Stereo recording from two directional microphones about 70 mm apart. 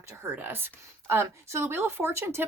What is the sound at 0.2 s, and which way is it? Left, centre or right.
Speech, right.